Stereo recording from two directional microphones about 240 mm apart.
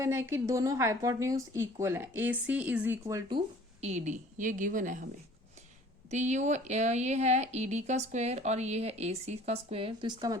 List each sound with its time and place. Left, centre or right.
0.0 s speech: centre; by 5.0 s right
6.1 s speech: right